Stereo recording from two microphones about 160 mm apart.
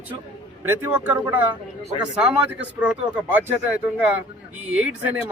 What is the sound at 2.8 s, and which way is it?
Speech, 10° right (ahead or behind).